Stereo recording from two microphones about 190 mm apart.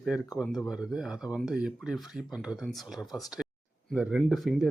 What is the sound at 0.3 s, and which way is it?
Speech, centre (ahead or behind).